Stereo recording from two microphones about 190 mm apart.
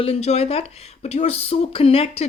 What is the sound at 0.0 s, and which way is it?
Speech, 35° left (ahead or behind).